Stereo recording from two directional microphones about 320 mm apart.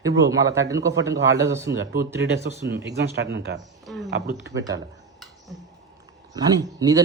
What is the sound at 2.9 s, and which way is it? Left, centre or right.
Speech, right.